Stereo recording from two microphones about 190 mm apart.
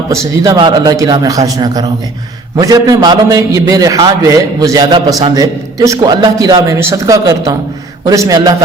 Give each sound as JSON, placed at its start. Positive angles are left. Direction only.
{"t": 0.4, "sound": "a man's voice", "side_deg": -20}